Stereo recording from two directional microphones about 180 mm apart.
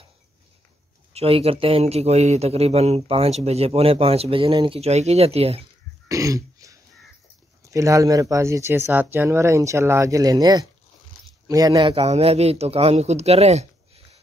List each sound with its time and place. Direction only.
1.1 s a man's voice: 35° right (ahead or behind)
6.0 s throat clearing: 20° right (ahead or behind)
7.6 s speech: 15° right (ahead or behind)
11.8 s a man's voice: 35° right (ahead or behind)